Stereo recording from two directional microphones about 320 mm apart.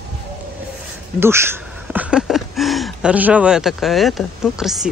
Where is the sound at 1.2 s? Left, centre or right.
Centre.